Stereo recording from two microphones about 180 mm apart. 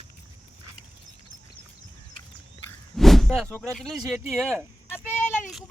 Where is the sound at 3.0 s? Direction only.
Centre (ahead or behind).